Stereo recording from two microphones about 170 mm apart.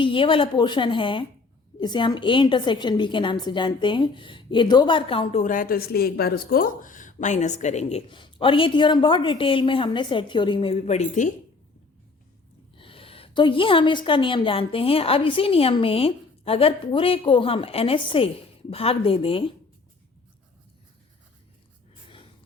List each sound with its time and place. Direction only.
0.0 s a woman's voice: 30° left (ahead or behind)
8.1 s a woman's voice: 30° left (ahead or behind)
12.7 s a woman's voice: 30° left (ahead or behind)